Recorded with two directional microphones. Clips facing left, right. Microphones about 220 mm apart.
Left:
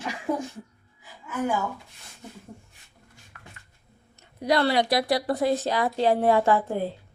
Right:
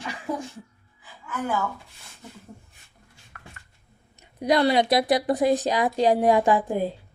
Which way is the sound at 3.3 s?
55° right (ahead or behind).